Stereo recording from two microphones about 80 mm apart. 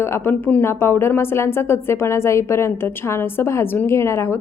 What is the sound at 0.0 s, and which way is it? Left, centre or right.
A woman's voice, left.